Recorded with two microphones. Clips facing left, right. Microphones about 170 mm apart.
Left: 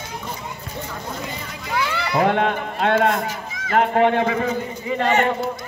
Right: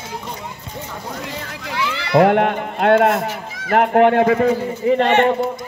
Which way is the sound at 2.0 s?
65° right (ahead or behind).